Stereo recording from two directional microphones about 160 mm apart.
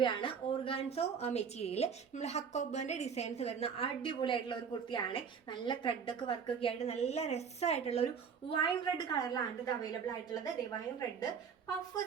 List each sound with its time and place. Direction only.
0.0 s a woman's voice: 30° left (ahead or behind)